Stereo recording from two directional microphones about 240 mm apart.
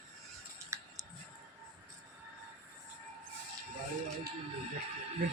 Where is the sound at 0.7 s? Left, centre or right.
Centre.